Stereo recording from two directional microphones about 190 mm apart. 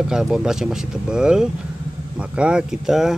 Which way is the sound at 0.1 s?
Centre (ahead or behind).